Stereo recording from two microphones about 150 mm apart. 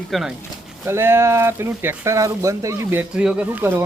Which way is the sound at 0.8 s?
15° right (ahead or behind).